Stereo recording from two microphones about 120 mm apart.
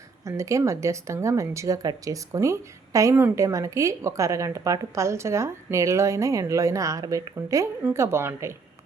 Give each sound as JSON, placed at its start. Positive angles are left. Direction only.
{"t": 0.3, "sound": "speech", "side_deg": -25}